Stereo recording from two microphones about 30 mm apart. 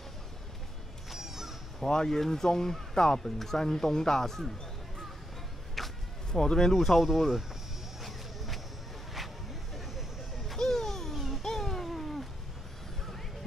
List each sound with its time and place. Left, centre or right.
1.1 s crow: centre
1.8 s speech: centre
5.8 s a sound: centre
6.3 s speech: centre
6.8 s speech: centre
8.0 s a sound: centre
9.8 s vehicle: centre
10.6 s music: centre
11.4 s a sound: centre